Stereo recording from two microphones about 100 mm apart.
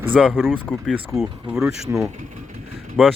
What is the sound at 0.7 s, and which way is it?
Speech, 15° left (ahead or behind).